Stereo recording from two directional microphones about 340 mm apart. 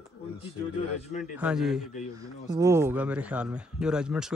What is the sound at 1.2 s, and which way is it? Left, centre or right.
Speech, centre.